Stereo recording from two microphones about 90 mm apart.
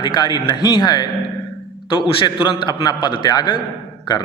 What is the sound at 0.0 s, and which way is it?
Speech, 55° left (ahead or behind).